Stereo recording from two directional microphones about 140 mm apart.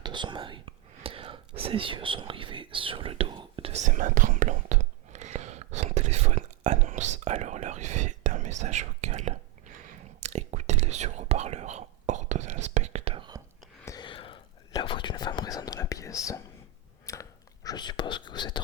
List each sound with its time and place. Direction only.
0.0 s whispering: 35° right (ahead or behind)
3.7 s whispering: 60° right (ahead or behind)
13.8 s a sound: 30° left (ahead or behind)
14.7 s whispering: 35° left (ahead or behind)